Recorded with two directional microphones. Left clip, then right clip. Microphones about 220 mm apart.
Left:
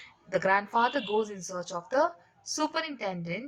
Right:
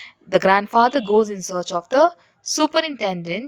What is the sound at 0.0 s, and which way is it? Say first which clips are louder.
Speech: right 11 dB; 40° right (ahead or behind).